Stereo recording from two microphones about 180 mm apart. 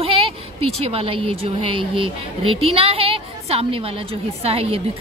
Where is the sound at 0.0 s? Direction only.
30° right (ahead or behind).